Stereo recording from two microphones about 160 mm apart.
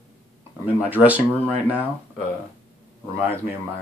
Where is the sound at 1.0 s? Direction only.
10° right (ahead or behind).